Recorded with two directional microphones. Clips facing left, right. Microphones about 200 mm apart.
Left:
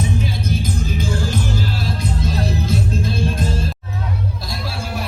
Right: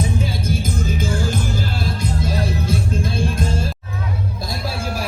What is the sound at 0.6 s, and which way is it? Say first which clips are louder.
Music: even; 50° right (ahead or behind).